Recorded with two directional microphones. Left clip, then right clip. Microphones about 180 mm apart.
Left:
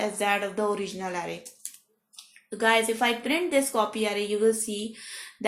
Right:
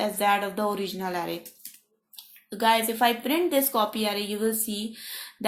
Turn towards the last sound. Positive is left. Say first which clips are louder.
# left 4 dB
turn(degrees=-35)  # may be behind; listen again after turning